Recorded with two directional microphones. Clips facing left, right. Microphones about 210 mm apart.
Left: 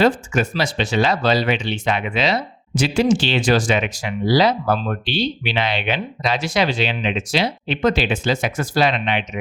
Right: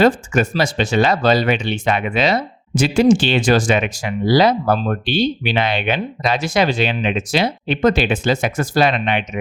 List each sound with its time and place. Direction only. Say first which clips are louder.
0.0 s speech: right 3 dB; 50° right (ahead or behind)